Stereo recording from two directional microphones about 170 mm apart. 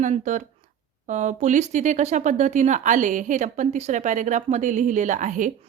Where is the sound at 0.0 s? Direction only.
45° right (ahead or behind).